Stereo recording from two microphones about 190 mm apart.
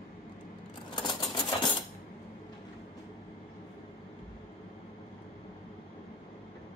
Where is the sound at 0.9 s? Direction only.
25° left (ahead or behind).